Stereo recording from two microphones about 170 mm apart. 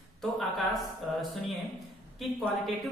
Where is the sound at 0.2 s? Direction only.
Centre (ahead or behind).